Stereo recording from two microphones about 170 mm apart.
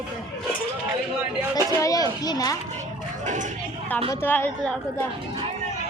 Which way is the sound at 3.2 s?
45° right (ahead or behind).